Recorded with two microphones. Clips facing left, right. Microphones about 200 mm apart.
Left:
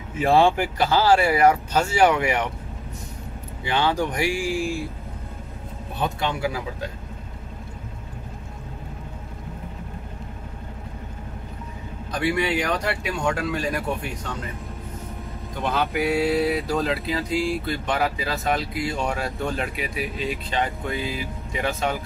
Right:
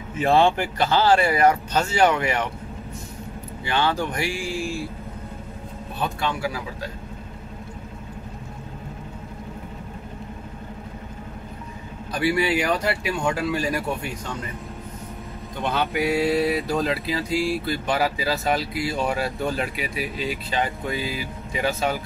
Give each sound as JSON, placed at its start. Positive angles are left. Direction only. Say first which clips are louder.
{"t": 0.2, "sound": "speech", "louder": "left 1 dB", "side_deg": 10}
{"t": 3.6, "sound": "speech", "louder": "left 1 dB", "side_deg": 15}
{"t": 5.9, "sound": "speech", "louder": "left 1 dB", "side_deg": 20}
{"t": 12.1, "sound": "speech", "louder": "right 1 dB", "side_deg": -5}
{"t": 15.6, "sound": "speech", "louder": "even", "side_deg": 0}